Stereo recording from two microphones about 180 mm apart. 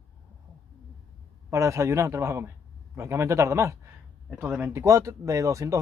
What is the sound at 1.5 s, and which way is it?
Speech, 15° right (ahead or behind).